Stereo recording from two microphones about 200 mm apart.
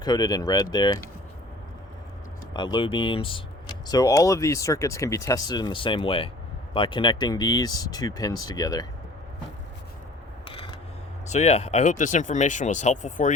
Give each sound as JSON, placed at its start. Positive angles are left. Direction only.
{"t": 0.0, "sound": "speech", "side_deg": 20}
{"t": 2.5, "sound": "speech", "side_deg": 20}
{"t": 10.4, "sound": "a sound", "side_deg": 25}
{"t": 11.3, "sound": "speech", "side_deg": 35}